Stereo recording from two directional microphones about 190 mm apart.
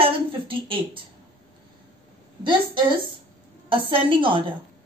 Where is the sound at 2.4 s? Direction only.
25° right (ahead or behind).